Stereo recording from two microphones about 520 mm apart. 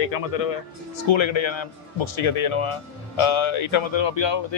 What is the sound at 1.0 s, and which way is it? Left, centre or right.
Speech, left.